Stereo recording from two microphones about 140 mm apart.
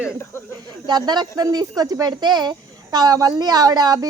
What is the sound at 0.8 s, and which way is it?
A woman's voice, 30° right (ahead or behind).